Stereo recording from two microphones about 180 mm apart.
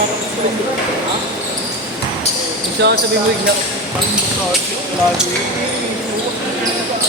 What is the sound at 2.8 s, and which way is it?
Speech, 75° right (ahead or behind).